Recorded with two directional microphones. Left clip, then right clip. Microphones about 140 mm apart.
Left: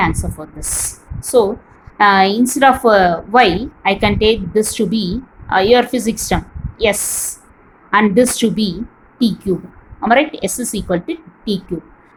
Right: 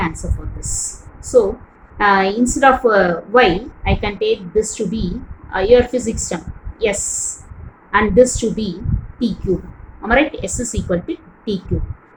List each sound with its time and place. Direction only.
0.0 s a woman's voice: 50° left (ahead or behind)
2.0 s a woman's voice: 50° left (ahead or behind)